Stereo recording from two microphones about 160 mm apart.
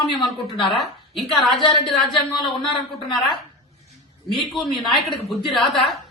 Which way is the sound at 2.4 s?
30° left (ahead or behind).